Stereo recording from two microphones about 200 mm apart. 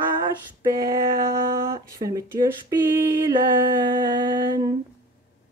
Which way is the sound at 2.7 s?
15° right (ahead or behind).